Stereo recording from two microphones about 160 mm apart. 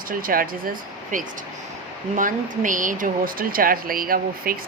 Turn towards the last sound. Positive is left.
turn(degrees=-65)  # may be behind; listen again after turning